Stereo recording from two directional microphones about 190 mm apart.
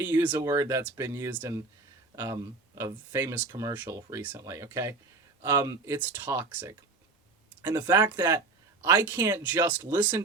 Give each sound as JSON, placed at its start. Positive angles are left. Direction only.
{"t": 0.0, "sound": "speech", "side_deg": -10}
{"t": 7.8, "sound": "speech", "side_deg": -10}